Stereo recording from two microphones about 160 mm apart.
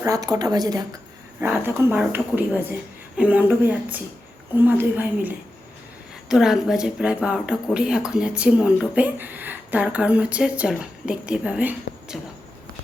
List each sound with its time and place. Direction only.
0.0 s speech: 20° right (ahead or behind)
1.4 s speech: 10° right (ahead or behind)